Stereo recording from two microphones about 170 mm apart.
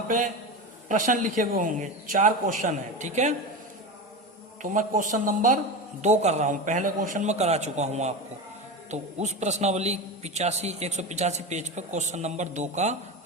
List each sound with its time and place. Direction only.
0.9 s a man's voice: 50° right (ahead or behind)
4.6 s a man's voice: 50° right (ahead or behind)